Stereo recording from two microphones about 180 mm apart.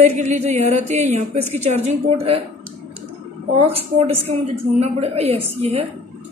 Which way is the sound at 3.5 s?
35° right (ahead or behind).